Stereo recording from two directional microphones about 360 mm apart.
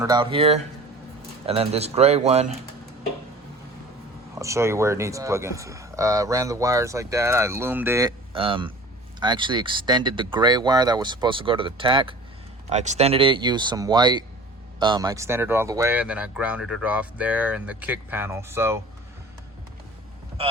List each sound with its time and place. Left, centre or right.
0.0 s speech: centre
4.4 s speech: centre